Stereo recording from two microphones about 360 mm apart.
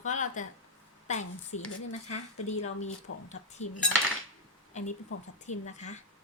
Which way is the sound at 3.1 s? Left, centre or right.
Left.